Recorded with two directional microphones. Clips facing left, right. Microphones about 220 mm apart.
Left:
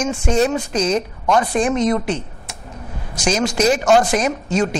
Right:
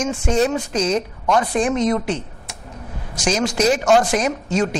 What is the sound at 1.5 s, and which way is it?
Speech, 15° left (ahead or behind).